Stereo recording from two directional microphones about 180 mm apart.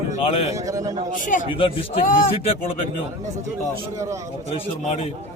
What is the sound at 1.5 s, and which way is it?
Speech, 30° left (ahead or behind).